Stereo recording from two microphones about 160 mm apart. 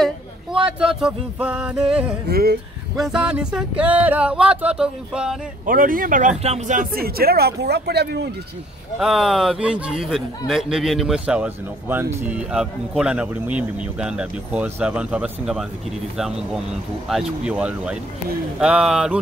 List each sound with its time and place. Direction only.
0.7 s speech: 5° right (ahead or behind)
2.2 s speech: 80° right
3.0 s speech: 5° right (ahead or behind)
5.7 s speech: 60° right (ahead or behind); by 8.3 s 90° right
9.0 s a man's voice: centre (ahead or behind)